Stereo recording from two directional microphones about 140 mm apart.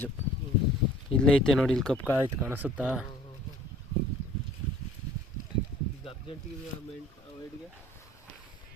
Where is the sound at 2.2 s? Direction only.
15° right (ahead or behind).